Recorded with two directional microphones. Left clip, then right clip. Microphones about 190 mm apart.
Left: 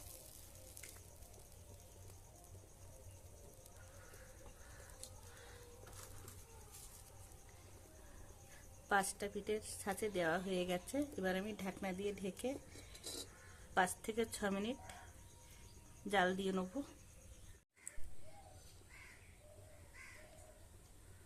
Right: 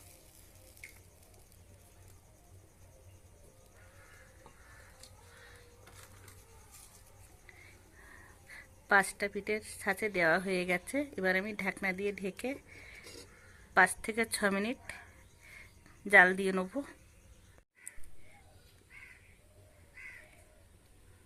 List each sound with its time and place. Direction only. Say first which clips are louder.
8.9 s a woman's voice: right 9 dB; 20° right (ahead or behind)
13.7 s a woman's voice: right 10 dB; 20° right (ahead or behind)
16.0 s a woman's voice: right 13 dB; 25° right (ahead or behind)